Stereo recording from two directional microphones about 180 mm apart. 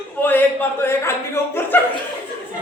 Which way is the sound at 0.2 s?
10° left (ahead or behind).